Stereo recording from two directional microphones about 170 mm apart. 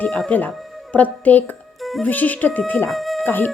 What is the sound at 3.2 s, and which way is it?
Speech, 10° left (ahead or behind).